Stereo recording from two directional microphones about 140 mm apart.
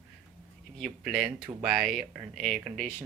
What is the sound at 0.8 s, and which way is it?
Speech, 5° right (ahead or behind).